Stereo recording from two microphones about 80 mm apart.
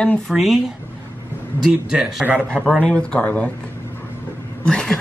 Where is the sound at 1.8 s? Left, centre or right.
Centre.